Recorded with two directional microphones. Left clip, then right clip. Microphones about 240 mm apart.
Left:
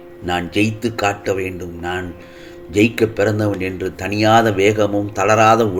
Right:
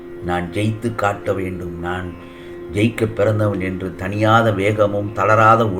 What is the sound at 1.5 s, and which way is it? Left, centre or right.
A man's voice, left.